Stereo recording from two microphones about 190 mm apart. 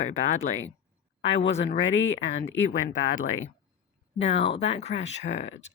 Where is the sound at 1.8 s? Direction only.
90° left.